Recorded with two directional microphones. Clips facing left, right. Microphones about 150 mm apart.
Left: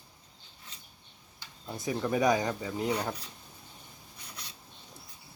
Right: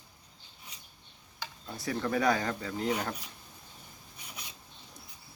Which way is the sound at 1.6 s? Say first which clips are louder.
Left 2 dB; 20° left (ahead or behind).